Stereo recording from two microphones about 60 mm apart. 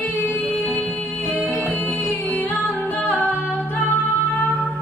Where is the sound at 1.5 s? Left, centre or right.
Left.